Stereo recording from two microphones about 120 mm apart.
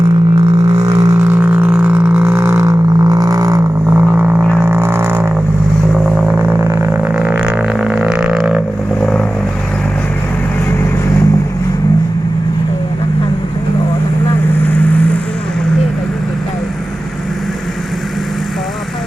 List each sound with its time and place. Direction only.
0.8 s didgeridoo: 30° right (ahead or behind)
3.8 s didgeridoo: 15° right (ahead or behind)
4.6 s music: 20° right (ahead or behind)
5.9 s a sound: 5° right (ahead or behind)
6.7 s didgeridoo: 25° right (ahead or behind)
7.1 s didgeridoo: 10° right (ahead or behind)
9.0 s vehicle: 10° left (ahead or behind)